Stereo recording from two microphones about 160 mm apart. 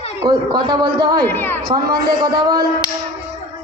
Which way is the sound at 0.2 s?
25° right (ahead or behind).